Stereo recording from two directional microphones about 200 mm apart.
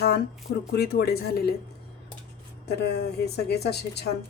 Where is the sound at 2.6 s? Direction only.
55° left (ahead or behind).